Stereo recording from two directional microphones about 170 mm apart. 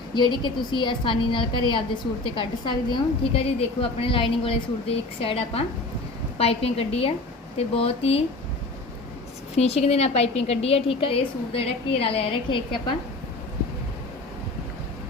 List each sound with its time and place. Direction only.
0.1 s a woman's voice: 25° left (ahead or behind)
9.6 s a woman's voice: 40° left (ahead or behind)